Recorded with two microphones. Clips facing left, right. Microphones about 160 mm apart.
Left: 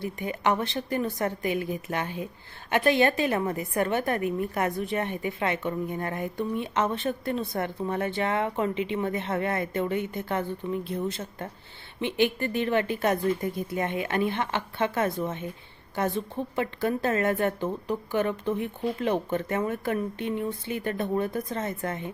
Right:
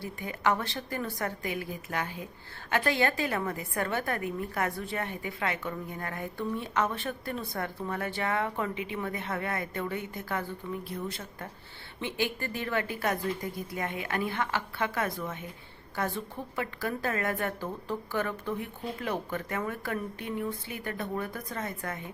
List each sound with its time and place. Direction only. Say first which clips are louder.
0.0 s a woman's voice: left 3 dB; 20° left (ahead or behind)